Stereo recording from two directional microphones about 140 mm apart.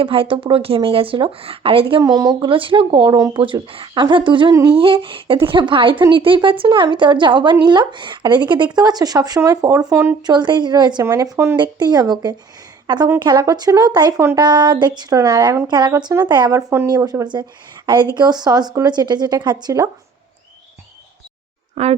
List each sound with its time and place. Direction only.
0.0 s speech: 40° right (ahead or behind)
2.0 s speech: 25° right (ahead or behind)
3.4 s speech: 40° right (ahead or behind); by 10.2 s 20° right (ahead or behind)
10.2 s speech: 30° right (ahead or behind)
21.8 s speech: 50° right (ahead or behind)